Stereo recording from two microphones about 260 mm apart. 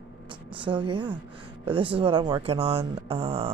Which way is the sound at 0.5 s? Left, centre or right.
Centre.